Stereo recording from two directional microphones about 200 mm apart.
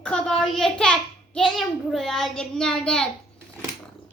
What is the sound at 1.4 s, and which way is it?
A child's voice, centre (ahead or behind).